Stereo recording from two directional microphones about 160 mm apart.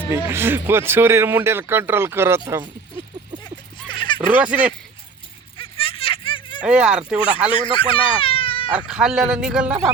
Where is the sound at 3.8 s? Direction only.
30° left (ahead or behind).